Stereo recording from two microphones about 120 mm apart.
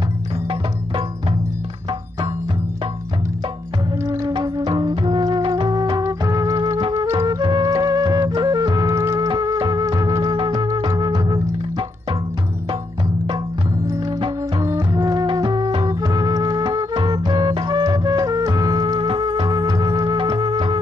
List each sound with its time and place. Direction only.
4.0 s music: 25° right (ahead or behind)
4.3 s music: 35° right (ahead or behind)
9.3 s music: 35° right (ahead or behind)
14.6 s music: 25° right (ahead or behind)